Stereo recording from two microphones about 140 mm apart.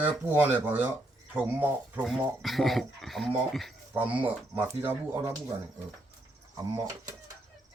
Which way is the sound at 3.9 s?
10° right (ahead or behind).